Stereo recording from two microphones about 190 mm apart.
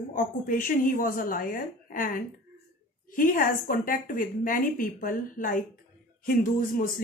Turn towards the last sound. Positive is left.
turn(degrees=45)  # may be behind; listen again after turning